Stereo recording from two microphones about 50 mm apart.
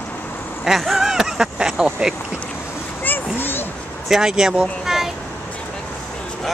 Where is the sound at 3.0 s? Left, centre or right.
Left.